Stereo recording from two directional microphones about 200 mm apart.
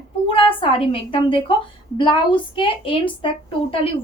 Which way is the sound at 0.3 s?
25° left (ahead or behind).